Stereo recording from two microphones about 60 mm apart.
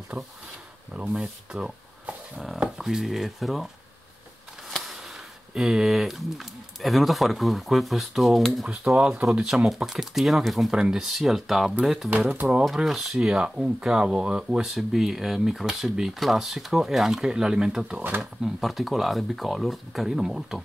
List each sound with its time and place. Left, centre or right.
0.1 s speech: right
1.1 s speech: centre
5.5 s speech: centre
8.6 s speech: centre
18.2 s speech: centre